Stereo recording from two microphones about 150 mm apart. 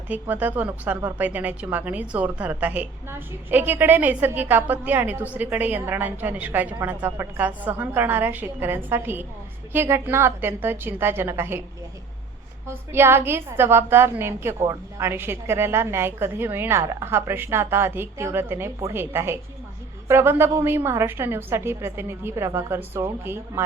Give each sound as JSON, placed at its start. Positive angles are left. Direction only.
{"t": 0.1, "sound": "speech", "side_deg": -10}
{"t": 12.6, "sound": "speech", "side_deg": -15}